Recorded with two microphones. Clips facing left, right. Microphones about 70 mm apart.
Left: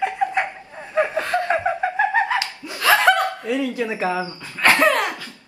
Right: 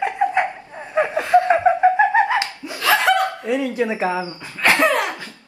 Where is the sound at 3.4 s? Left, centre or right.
Right.